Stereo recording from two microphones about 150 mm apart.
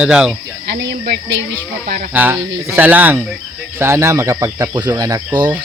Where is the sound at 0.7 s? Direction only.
90° right.